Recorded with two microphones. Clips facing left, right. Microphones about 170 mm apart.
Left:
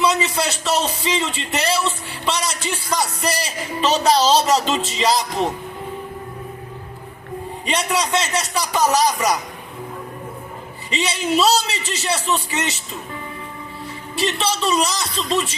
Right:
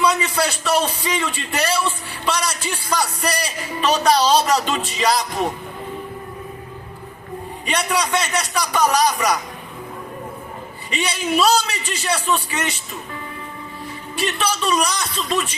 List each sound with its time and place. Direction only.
0.0 s speech: 25° left (ahead or behind)
7.7 s speech: 25° left (ahead or behind)
10.9 s speech: 25° left (ahead or behind)
14.2 s speech: 25° left (ahead or behind)